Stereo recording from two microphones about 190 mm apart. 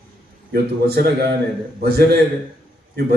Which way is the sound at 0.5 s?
55° right (ahead or behind).